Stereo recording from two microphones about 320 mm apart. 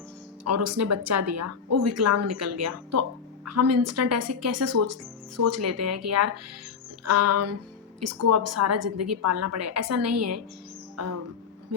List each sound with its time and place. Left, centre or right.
0.4 s a woman's voice: right
10.9 s music: right